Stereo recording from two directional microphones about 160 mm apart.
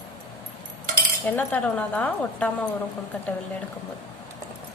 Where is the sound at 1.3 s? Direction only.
10° left (ahead or behind).